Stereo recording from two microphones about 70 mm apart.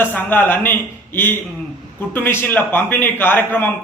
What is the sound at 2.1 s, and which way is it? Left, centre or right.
A man's voice, left.